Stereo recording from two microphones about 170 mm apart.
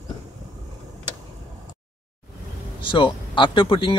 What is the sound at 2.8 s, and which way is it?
Speech, 30° left (ahead or behind).